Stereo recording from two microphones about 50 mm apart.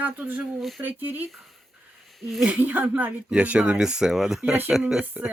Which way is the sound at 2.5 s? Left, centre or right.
Right.